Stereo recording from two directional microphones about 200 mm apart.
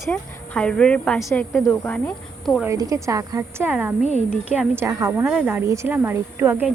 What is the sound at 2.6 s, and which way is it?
A woman's voice, 15° right (ahead or behind).